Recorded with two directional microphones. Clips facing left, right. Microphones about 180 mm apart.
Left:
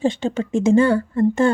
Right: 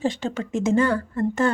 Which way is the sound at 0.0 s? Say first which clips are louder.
Left 5 dB; 30° left (ahead or behind).